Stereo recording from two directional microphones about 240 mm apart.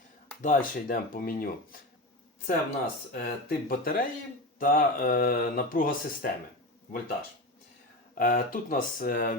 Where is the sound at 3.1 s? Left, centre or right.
Left.